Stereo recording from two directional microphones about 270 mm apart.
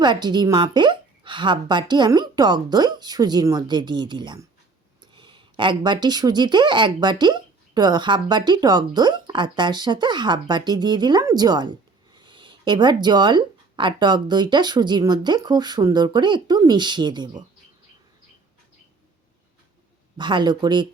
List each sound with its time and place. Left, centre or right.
0.0 s speech: centre
20.1 s speech: centre